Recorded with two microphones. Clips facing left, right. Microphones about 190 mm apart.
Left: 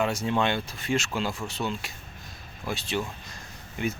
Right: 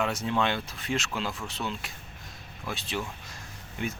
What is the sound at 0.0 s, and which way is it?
Speech, centre (ahead or behind).